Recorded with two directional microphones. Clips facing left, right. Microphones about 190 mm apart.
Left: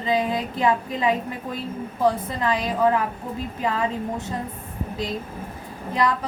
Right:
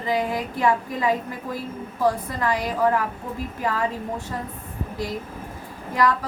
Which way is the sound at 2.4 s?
20° left (ahead or behind).